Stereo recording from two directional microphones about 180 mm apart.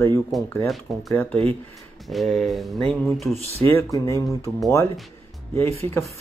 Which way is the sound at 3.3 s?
35° right (ahead or behind).